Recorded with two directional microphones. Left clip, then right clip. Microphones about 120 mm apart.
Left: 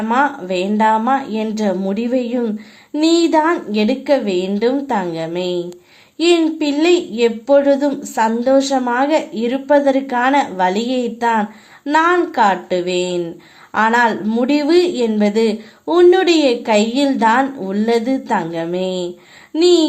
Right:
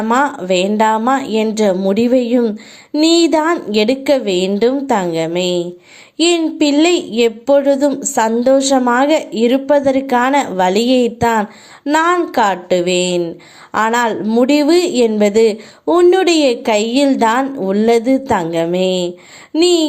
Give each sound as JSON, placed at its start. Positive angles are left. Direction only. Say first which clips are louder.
{"t": 0.0, "sound": "a woman's voice", "louder": "right 2 dB", "side_deg": -30}